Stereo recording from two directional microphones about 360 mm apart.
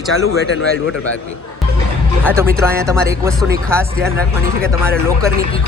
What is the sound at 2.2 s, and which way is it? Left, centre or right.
Speech, centre.